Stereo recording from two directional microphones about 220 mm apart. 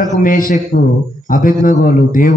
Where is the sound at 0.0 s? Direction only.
40° left (ahead or behind).